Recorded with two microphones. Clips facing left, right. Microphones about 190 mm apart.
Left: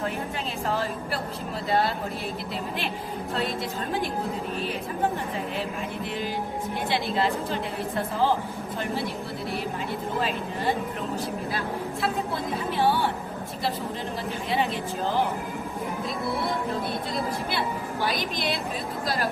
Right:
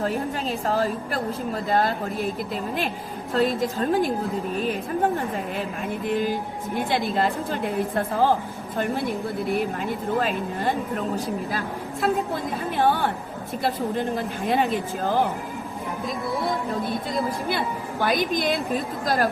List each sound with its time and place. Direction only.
0.7 s a woman's voice: 40° right (ahead or behind)
3.3 s a woman's voice: 40° right (ahead or behind)
6.1 s a woman's voice: 50° right (ahead or behind)
10.2 s a woman's voice: 50° right (ahead or behind)
12.0 s a woman's voice: 50° right (ahead or behind)
18.0 s a woman's voice: 50° right (ahead or behind)